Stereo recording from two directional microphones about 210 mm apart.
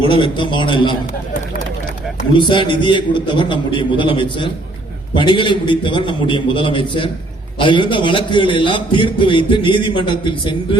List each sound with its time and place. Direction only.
0.1 s a man's voice: 25° left (ahead or behind)
2.3 s a man's voice: 20° left (ahead or behind)